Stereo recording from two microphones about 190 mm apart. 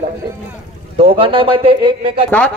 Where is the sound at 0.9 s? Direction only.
30° right (ahead or behind).